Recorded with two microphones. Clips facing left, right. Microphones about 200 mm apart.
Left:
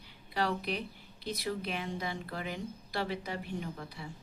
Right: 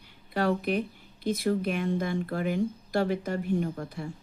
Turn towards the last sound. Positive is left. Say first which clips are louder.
# right 9 dB
turn(degrees=-50)  # may be behind; listen again after turning